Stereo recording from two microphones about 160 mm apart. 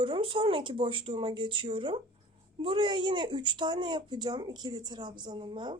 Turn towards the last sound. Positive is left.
turn(degrees=-30)  # may be behind; listen again after turning